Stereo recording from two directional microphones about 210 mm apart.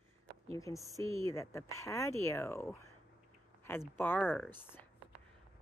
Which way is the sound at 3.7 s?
10° left (ahead or behind).